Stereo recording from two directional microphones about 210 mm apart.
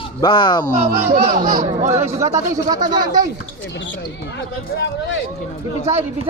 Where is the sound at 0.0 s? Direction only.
25° left (ahead or behind).